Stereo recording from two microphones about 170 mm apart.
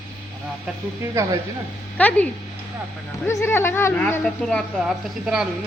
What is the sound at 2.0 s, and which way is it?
A woman's voice, 10° left (ahead or behind).